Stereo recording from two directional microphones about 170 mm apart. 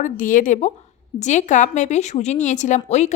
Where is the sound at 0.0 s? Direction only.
50° left (ahead or behind).